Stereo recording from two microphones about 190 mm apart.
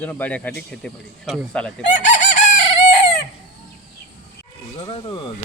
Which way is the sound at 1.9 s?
40° left (ahead or behind).